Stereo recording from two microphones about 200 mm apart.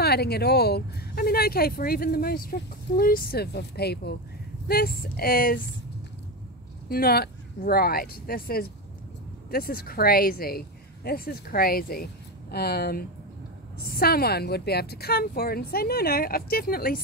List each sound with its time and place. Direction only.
0.0 s a woman's voice: 55° left (ahead or behind)
6.9 s a woman's voice: 50° left (ahead or behind)